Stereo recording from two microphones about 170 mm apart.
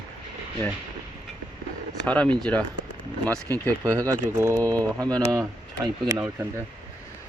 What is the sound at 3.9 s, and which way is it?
Speech, 20° right (ahead or behind).